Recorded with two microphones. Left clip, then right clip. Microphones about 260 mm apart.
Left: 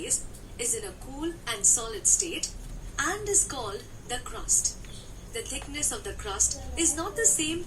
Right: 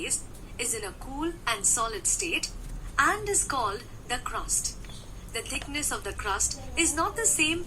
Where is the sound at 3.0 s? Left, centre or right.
Centre.